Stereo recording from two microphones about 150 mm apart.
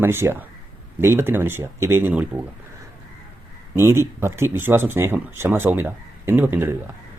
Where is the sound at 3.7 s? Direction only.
15° right (ahead or behind).